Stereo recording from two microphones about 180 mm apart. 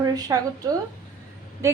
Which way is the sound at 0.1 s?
20° right (ahead or behind).